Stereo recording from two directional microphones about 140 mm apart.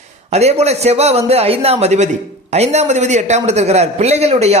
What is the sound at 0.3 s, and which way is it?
Speech, 50° right (ahead or behind).